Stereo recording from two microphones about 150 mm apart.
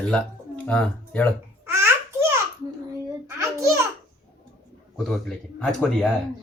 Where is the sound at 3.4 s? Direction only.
20° right (ahead or behind).